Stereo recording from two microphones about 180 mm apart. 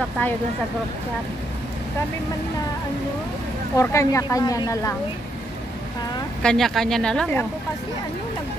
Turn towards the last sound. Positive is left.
turn(degrees=5)  # may be behind; listen again after turning